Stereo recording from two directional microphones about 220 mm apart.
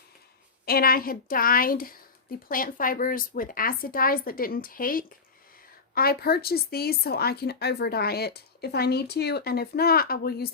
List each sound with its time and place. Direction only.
0.6 s speech: 45° left (ahead or behind)